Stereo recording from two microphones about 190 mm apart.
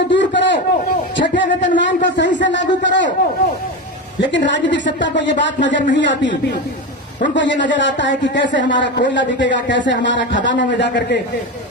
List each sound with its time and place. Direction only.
0.1 s a sound: 70° left (ahead or behind)
4.2 s speech: 70° left (ahead or behind)
7.3 s speech: 70° left (ahead or behind)